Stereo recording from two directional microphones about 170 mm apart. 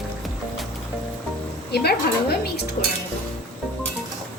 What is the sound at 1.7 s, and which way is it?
A woman's voice, 70° left (ahead or behind).